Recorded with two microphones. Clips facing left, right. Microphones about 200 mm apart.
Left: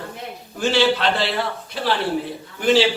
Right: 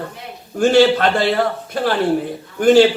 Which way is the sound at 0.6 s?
50° right (ahead or behind).